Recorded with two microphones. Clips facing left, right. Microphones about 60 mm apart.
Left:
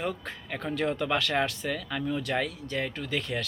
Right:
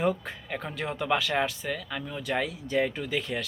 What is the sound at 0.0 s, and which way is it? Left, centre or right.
Speech, centre.